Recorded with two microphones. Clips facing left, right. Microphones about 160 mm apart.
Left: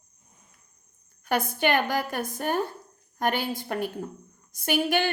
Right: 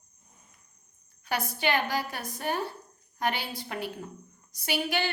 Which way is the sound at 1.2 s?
50° left (ahead or behind).